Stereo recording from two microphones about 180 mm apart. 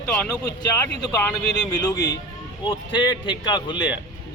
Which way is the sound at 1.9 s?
20° left (ahead or behind).